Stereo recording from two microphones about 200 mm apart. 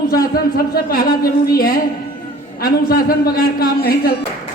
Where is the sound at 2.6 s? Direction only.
45° left (ahead or behind).